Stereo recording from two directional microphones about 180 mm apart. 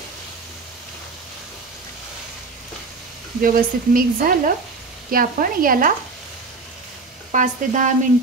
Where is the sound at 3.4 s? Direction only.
50° right (ahead or behind).